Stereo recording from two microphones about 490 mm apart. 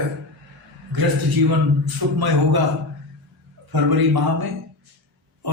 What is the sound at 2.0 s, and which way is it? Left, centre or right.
Speech, right.